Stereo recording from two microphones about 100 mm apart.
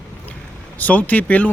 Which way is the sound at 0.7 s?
15° left (ahead or behind).